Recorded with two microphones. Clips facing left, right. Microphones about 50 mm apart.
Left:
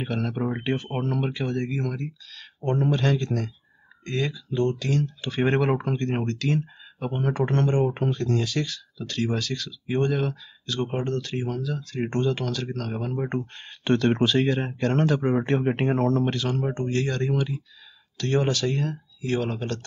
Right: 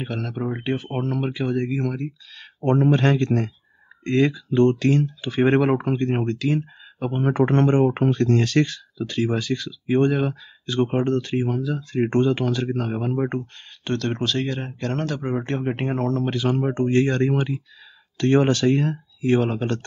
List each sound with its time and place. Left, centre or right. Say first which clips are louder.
0.0 s speech: even; centre
2.8 s speech: right 4 dB; right
5.0 s speech: right 4 dB; centre
7.2 s speech: right 5 dB; centre
7.4 s speech: right 5 dB; right
8.0 s speech: right 6 dB; right
8.9 s speech: right 4 dB; centre
13.8 s speech: left 3 dB; centre
16.3 s speech: right 4 dB; centre
16.8 s speech: right 9 dB; right